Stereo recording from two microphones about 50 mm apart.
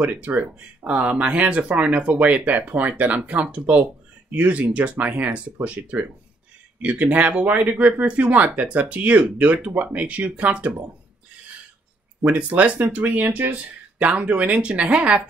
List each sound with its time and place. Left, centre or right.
0.0 s speech: right
12.2 s speech: right